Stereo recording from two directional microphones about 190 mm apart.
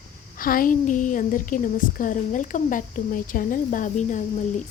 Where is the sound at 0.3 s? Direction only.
45° left (ahead or behind).